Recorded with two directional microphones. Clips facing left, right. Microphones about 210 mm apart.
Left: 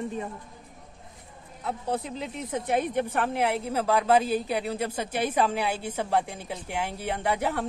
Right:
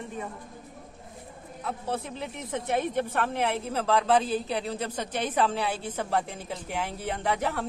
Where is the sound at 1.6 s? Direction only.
15° left (ahead or behind).